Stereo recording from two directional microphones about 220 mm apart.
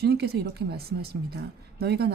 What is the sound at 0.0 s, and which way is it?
Speech, 45° right (ahead or behind).